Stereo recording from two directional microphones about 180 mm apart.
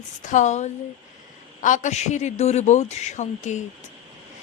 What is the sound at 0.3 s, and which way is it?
Speech, 40° left (ahead or behind).